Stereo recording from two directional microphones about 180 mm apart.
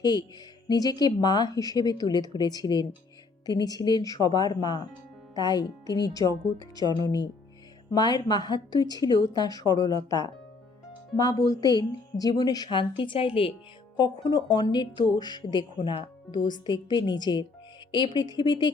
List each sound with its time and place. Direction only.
0.0 s a woman's voice: 20° left (ahead or behind)